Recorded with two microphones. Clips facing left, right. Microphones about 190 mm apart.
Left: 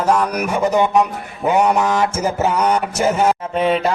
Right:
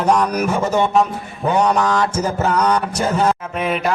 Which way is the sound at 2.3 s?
10° left (ahead or behind).